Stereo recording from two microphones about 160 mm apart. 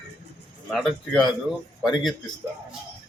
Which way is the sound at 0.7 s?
Centre (ahead or behind).